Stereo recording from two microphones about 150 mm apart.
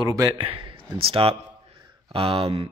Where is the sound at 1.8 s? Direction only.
35° right (ahead or behind).